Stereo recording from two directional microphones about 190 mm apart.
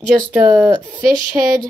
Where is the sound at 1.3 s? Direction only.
20° right (ahead or behind).